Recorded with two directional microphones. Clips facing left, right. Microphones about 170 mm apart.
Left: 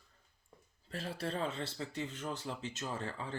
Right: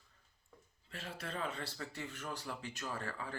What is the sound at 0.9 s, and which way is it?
Speech, 35° left (ahead or behind).